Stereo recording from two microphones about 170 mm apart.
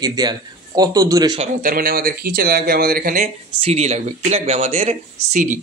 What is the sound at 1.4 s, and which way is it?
Speech, 55° right (ahead or behind).